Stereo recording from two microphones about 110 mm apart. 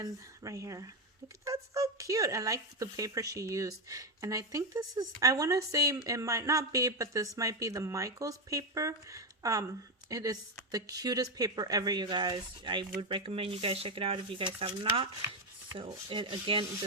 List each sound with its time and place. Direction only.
0.0 s speech: 30° right (ahead or behind); by 15.0 s 50° right (ahead or behind)
15.7 s rub: 45° right (ahead or behind)